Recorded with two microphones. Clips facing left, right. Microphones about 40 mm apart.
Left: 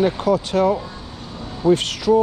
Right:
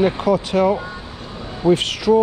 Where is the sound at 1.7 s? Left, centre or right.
Right.